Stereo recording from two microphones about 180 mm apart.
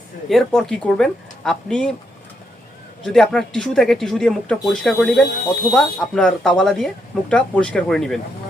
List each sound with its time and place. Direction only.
0.3 s speech: centre (ahead or behind)
3.0 s speech: centre (ahead or behind)